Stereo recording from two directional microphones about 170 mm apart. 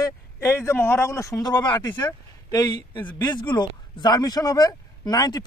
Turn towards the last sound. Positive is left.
turn(degrees=25)  # may be behind; listen again after turning